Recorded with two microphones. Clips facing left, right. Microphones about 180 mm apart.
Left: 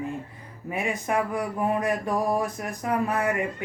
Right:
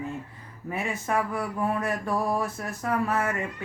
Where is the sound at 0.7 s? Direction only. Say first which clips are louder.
Left 2 dB; 15° left (ahead or behind).